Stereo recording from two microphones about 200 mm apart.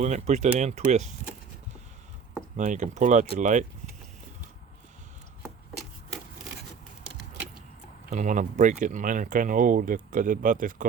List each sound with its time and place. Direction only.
0.0 s speech: 35° right (ahead or behind)
2.6 s speech: 40° right (ahead or behind)
8.1 s speech: 35° right (ahead or behind)